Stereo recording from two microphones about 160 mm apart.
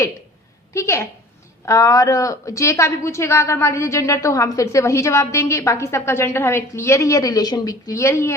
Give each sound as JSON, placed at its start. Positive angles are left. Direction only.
{"t": 0.7, "sound": "a woman's voice", "side_deg": 15}